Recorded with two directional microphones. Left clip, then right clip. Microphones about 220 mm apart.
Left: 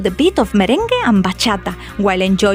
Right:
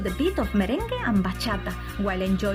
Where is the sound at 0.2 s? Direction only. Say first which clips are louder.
Left 11 dB; 45° left (ahead or behind).